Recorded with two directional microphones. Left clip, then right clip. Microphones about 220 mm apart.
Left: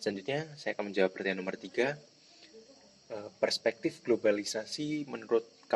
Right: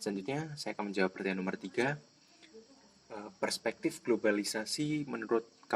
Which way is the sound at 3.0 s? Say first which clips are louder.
Left 5 dB; 30° right (ahead or behind).